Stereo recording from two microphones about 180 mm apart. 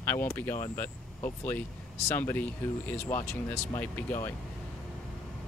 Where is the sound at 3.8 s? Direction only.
10° left (ahead or behind).